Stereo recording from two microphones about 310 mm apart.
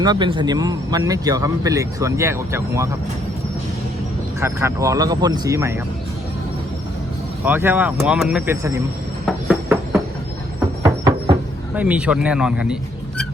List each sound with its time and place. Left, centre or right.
0.0 s speech: centre
4.4 s speech: centre
7.4 s speech: centre
9.2 s a sound: centre
11.7 s speech: centre